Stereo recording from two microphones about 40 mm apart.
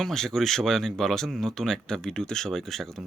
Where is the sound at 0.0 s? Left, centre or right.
Centre.